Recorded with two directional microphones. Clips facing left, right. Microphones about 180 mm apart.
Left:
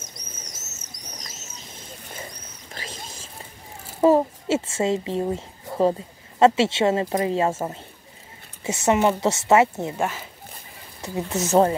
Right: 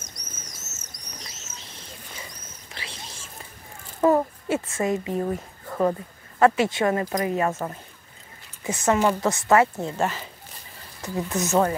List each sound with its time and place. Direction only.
0.7 s bird: 45° left (ahead or behind)
2.7 s a sound: 45° left (ahead or behind)
4.0 s a child's voice: 25° left (ahead or behind)
9.9 s speech: 10° left (ahead or behind)
11.0 s speech: 20° left (ahead or behind)